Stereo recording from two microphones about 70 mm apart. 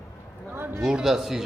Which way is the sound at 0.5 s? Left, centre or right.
Right.